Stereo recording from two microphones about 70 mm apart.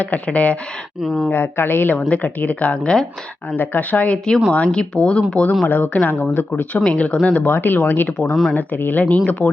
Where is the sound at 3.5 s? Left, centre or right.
Left.